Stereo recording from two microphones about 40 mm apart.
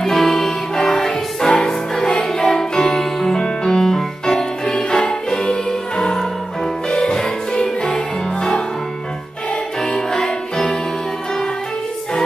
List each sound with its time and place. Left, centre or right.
0.0 s music: centre
9.8 s music: centre